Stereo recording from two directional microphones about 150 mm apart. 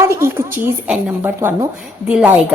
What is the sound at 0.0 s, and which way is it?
A woman's voice, 20° right (ahead or behind).